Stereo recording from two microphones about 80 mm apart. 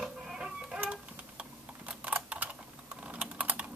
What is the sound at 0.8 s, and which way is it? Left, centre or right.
Typing, centre.